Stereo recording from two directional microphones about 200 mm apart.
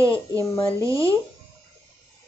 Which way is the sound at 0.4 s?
15° left (ahead or behind).